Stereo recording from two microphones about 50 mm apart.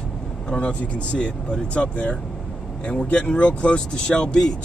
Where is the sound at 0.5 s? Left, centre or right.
Left.